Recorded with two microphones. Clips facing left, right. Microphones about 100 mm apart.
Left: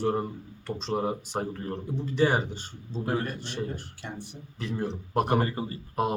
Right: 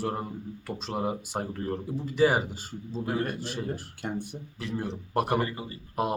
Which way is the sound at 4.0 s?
50° right (ahead or behind).